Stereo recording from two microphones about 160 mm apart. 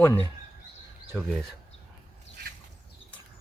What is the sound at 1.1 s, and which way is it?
Speech, centre (ahead or behind).